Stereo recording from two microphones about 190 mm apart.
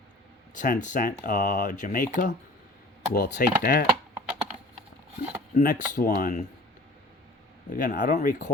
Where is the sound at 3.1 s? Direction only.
55° left (ahead or behind).